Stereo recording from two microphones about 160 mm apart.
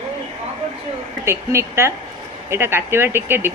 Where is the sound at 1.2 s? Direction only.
15° right (ahead or behind).